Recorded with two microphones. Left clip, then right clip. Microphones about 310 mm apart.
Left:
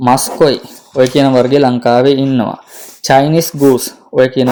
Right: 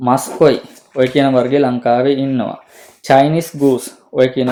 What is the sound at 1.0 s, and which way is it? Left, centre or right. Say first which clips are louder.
Speech: left 3 dB; left.